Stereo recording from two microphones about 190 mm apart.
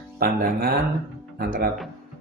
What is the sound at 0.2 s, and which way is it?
Speech, 50° right (ahead or behind).